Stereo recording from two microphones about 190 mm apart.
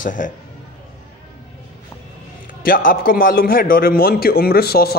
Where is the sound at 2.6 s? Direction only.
50° left (ahead or behind).